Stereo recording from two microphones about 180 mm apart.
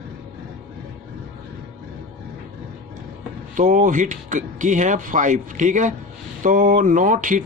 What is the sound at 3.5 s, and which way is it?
Speech, 45° right (ahead or behind).